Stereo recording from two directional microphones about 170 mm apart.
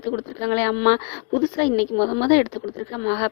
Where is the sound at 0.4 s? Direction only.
40° left (ahead or behind).